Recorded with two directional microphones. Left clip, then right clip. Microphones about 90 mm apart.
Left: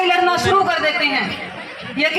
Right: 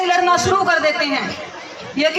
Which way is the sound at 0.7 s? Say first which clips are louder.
Right 1 dB; 35° right (ahead or behind).